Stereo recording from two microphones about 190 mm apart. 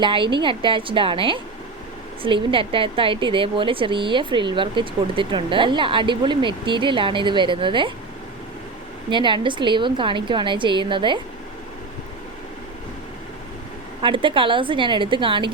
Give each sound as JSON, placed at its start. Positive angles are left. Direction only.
{"t": 0.0, "sound": "a woman's voice", "side_deg": -25}
{"t": 9.0, "sound": "a woman's voice", "side_deg": -25}
{"t": 14.0, "sound": "a woman's voice", "side_deg": -25}